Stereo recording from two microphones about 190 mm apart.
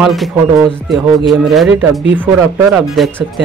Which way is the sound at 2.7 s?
Centre (ahead or behind).